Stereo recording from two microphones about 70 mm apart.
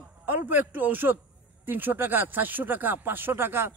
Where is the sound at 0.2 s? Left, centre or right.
Right.